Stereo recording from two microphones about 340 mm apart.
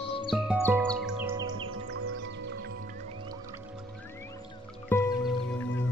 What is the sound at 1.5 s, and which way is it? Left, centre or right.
Music, right.